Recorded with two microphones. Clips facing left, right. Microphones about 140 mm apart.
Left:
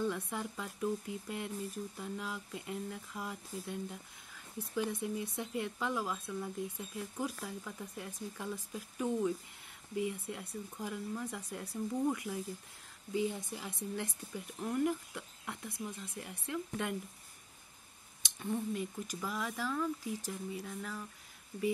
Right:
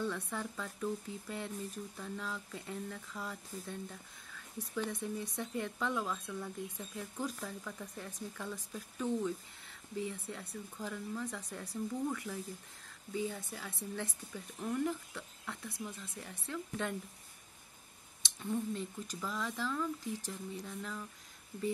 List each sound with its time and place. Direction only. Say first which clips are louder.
0.0 s speech: left 2 dB; 15° left (ahead or behind)
5.0 s speech: left 1 dB; 10° left (ahead or behind)
18.2 s speech: even; 10° left (ahead or behind)